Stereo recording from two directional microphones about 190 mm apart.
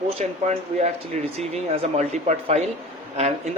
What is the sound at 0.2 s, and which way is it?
Speech, 35° right (ahead or behind).